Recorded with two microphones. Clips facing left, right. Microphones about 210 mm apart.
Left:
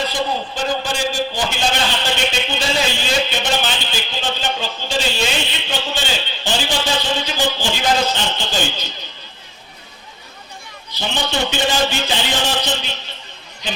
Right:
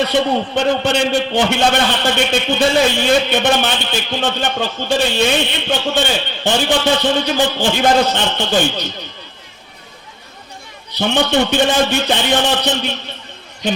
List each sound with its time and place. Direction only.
0.0 s a man's voice: 65° right (ahead or behind)
10.9 s a man's voice: 60° right (ahead or behind)